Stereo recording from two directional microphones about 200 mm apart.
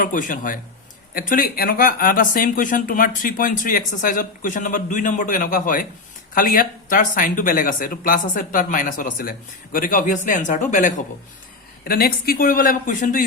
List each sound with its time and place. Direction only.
0.0 s speech: 40° left (ahead or behind)